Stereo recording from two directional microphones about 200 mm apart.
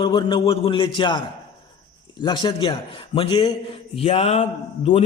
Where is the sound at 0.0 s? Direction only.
25° left (ahead or behind).